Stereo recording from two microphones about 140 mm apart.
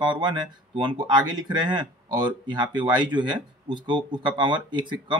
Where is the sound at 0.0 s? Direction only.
35° right (ahead or behind).